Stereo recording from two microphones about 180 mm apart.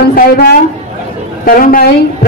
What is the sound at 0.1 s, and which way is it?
A man's voice, 55° left (ahead or behind).